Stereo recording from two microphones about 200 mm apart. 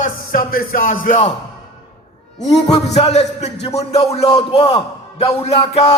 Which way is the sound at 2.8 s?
35° left (ahead or behind).